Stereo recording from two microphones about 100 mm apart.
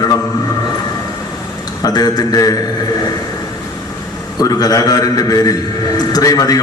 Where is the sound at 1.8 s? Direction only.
40° left (ahead or behind).